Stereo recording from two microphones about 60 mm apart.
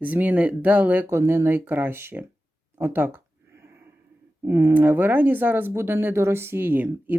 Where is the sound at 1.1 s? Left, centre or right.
Right.